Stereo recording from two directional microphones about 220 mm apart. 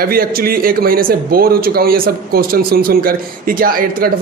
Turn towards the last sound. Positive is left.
turn(degrees=-40)  # may be behind; listen again after turning